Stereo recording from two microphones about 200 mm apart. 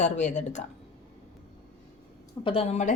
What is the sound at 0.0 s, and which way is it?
Speech, 35° left (ahead or behind).